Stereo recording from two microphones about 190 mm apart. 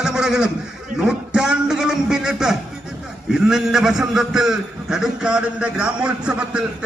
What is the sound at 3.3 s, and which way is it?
A man's voice, 5° right (ahead or behind).